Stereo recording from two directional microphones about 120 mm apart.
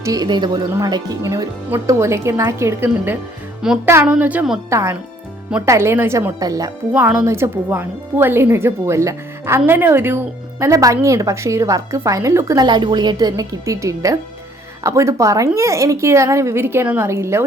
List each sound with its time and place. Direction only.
0.0 s speech: 30° right (ahead or behind)
3.6 s a woman's voice: 5° right (ahead or behind)
4.7 s speech: 25° right (ahead or behind)
6.9 s a woman's voice: 10° right (ahead or behind)
7.3 s speech: 20° right (ahead or behind)
12.6 s a woman's voice: 40° right (ahead or behind); by 17.4 s 25° right (ahead or behind)